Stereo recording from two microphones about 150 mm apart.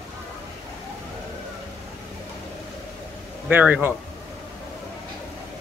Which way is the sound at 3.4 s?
10° right (ahead or behind).